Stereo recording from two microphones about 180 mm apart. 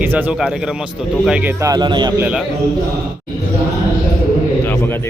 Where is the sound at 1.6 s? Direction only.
25° right (ahead or behind).